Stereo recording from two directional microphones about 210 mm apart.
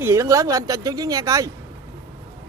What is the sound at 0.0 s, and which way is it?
Speech, 15° right (ahead or behind).